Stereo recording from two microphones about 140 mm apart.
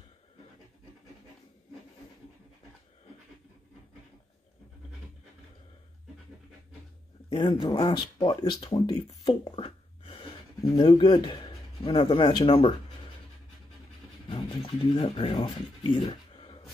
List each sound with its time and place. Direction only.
7.2 s speech: 35° left (ahead or behind)
14.3 s a sound: 35° left (ahead or behind)
15.3 s speech: 35° left (ahead or behind)